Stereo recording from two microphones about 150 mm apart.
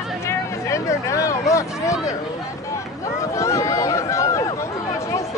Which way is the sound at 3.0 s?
20° left (ahead or behind).